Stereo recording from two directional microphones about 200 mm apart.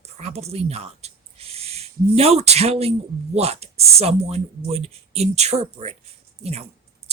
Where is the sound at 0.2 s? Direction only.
30° right (ahead or behind).